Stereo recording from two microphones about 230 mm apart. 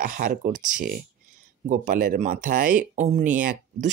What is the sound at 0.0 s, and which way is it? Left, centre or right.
Speech, right.